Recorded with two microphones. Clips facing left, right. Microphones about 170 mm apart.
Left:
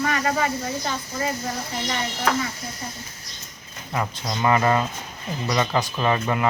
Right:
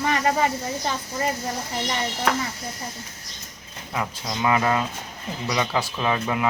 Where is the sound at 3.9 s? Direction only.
Centre (ahead or behind).